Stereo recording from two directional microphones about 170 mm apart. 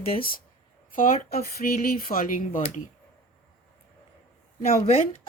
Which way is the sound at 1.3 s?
65° left (ahead or behind).